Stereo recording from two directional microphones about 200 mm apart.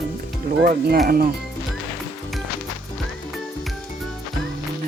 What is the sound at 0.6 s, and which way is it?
Speech, 50° right (ahead or behind).